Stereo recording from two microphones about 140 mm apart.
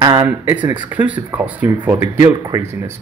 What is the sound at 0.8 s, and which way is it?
Speech, 10° right (ahead or behind).